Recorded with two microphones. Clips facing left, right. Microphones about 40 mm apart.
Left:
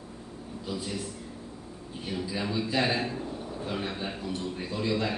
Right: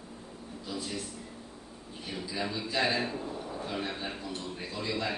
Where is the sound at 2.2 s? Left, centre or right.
Centre.